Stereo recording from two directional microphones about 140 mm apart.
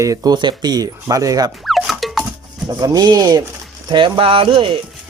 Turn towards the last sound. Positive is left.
turn(degrees=-40)  # may be behind; listen again after turning